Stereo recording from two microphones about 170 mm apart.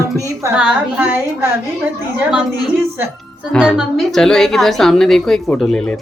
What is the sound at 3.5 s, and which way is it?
A woman's voice, 5° right (ahead or behind).